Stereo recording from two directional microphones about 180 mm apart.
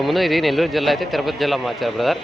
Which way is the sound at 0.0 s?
Centre (ahead or behind).